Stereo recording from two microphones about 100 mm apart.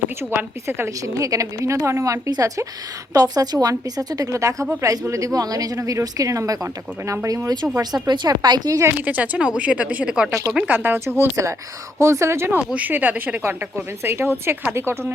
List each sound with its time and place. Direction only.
0.2 s speech: 20° right (ahead or behind); by 8.8 s 45° right (ahead or behind)
9.0 s a woman's voice: 15° right (ahead or behind)
10.8 s speech: 20° right (ahead or behind)